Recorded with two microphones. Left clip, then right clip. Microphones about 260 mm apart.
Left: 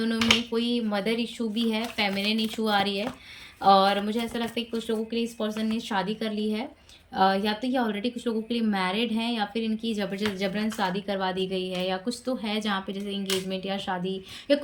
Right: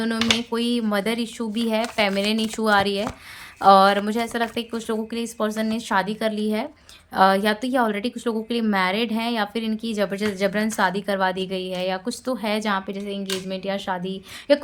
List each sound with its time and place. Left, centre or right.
0.0 s a woman's voice: centre